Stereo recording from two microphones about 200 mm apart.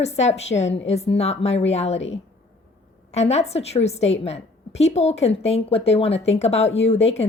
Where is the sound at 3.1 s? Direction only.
35° left (ahead or behind).